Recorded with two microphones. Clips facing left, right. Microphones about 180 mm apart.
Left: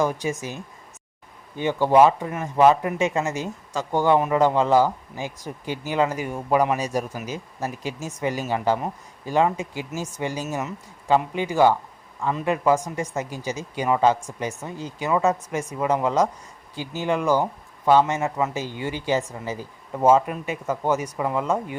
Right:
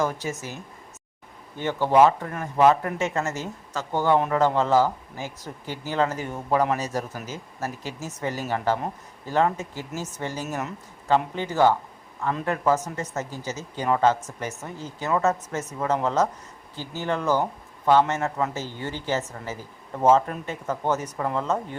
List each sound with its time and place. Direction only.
0.0 s speech: 15° left (ahead or behind)